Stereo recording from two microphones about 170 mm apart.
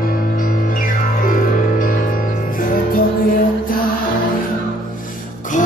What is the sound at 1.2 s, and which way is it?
Music, 55° left (ahead or behind).